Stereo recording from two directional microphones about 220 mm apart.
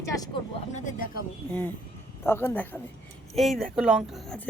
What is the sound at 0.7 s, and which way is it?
Speech, 35° left (ahead or behind).